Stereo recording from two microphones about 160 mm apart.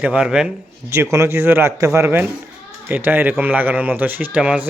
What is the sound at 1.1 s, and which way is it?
Speech, 15° right (ahead or behind).